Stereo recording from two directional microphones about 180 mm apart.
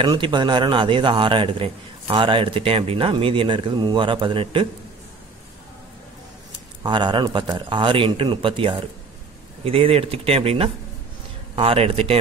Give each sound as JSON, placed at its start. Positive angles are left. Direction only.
{"t": 0.0, "sound": "a man's voice", "side_deg": -25}
{"t": 6.8, "sound": "a man's voice", "side_deg": -25}